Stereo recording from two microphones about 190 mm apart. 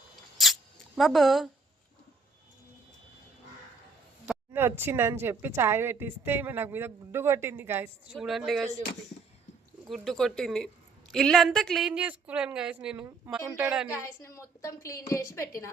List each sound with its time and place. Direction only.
0.3 s a sound: centre (ahead or behind)
4.3 s a woman's voice: 10° right (ahead or behind)
9.9 s a woman's voice: centre (ahead or behind)
14.2 s a woman's voice: 15° left (ahead or behind)